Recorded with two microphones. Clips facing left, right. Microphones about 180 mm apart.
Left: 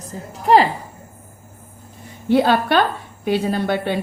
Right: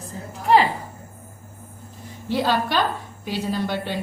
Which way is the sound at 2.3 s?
55° left (ahead or behind).